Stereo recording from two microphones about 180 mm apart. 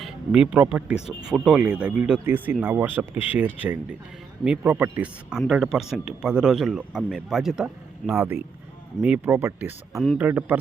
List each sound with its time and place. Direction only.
0.0 s speech: 5° right (ahead or behind)
10.0 s speech: centre (ahead or behind)